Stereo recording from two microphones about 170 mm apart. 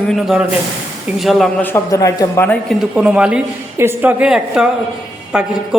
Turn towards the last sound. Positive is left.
turn(degrees=-5)  # may be behind; listen again after turning